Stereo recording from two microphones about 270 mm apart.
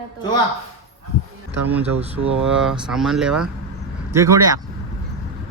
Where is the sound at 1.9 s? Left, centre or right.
Right.